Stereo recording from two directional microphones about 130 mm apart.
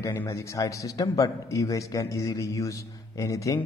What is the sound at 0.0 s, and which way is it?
A man's voice, 25° left (ahead or behind).